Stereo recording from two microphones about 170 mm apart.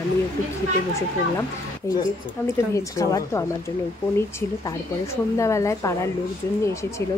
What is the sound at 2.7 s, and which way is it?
A woman's voice, 20° left (ahead or behind).